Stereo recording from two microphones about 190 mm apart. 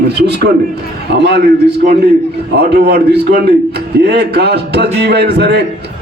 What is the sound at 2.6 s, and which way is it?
A man's voice, 60° right (ahead or behind).